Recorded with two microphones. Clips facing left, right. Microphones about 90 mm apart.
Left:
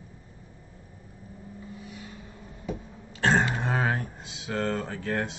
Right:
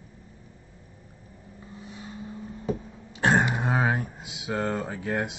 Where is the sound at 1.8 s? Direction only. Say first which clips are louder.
Even; 30° right (ahead or behind).